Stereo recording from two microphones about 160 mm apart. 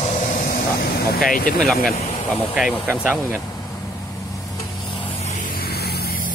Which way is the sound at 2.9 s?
5° right (ahead or behind).